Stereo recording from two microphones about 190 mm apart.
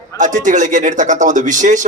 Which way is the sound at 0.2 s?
40° right (ahead or behind).